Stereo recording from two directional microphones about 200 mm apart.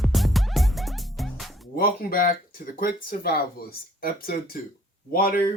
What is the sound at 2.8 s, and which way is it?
Speech, 45° left (ahead or behind).